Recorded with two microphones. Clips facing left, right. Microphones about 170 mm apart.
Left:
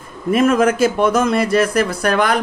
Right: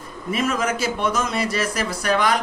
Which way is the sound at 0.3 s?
55° left (ahead or behind).